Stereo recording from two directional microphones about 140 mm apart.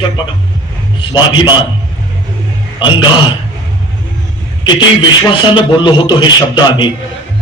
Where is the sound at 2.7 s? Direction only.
35° left (ahead or behind).